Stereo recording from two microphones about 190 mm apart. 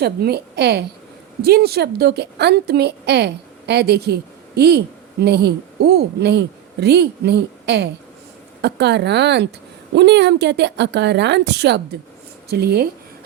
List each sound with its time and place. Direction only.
0.0 s a woman's voice: 55° right (ahead or behind)